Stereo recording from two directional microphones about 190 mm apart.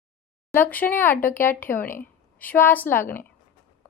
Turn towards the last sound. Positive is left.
turn(degrees=10)  # may be behind; listen again after turning